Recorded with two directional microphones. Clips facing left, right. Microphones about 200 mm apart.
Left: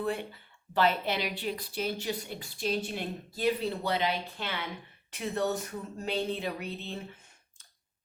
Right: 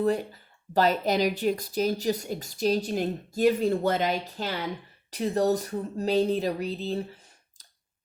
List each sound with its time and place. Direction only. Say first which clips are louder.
0.0 s a woman's voice: right 7 dB; 40° right (ahead or behind)